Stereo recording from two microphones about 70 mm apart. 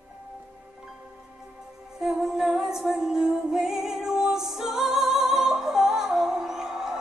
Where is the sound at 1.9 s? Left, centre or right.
Centre.